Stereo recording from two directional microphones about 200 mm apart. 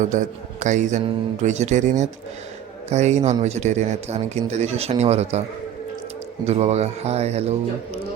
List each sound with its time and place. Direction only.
0.0 s a man's voice: 40° right (ahead or behind)
6.4 s a man's voice: 35° right (ahead or behind)